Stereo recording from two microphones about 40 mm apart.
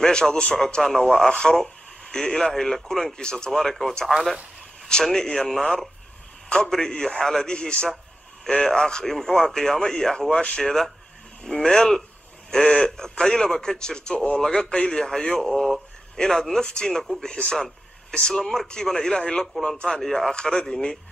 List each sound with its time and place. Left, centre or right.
0.0 s speech: centre
3.5 s speech: centre
4.8 s a man's voice: centre
18.4 s a man's voice: centre